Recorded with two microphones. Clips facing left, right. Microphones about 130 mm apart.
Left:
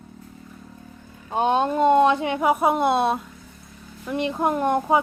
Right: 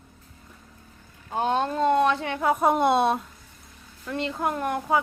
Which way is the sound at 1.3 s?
20° left (ahead or behind).